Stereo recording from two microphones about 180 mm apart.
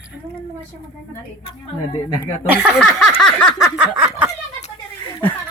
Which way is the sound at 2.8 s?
5° left (ahead or behind).